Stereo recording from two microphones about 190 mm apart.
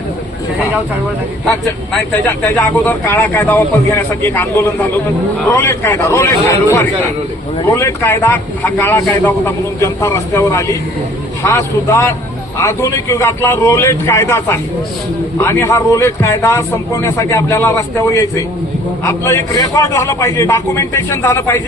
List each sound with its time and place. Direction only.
2.6 s a man's voice: 10° left (ahead or behind)